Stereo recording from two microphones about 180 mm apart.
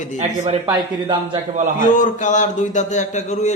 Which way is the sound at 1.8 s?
45° left (ahead or behind).